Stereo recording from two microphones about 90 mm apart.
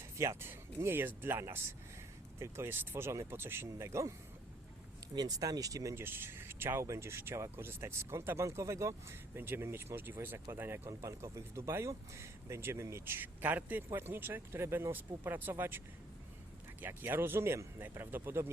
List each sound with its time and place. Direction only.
0.2 s speech: 30° right (ahead or behind)
5.1 s speech: 45° right (ahead or behind); by 10.8 s 25° right (ahead or behind)
10.8 s speech: 35° right (ahead or behind)
16.8 s speech: 25° right (ahead or behind)